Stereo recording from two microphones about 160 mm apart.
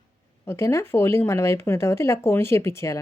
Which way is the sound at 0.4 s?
15° left (ahead or behind).